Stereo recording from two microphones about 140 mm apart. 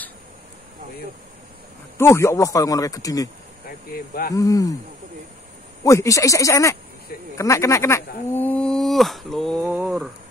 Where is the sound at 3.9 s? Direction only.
90° left.